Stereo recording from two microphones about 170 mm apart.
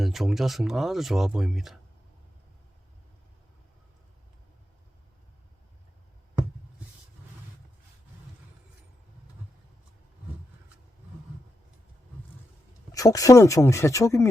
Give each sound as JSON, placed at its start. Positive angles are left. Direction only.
{"t": 0.0, "sound": "speech", "side_deg": 0}
{"t": 12.9, "sound": "speech", "side_deg": 20}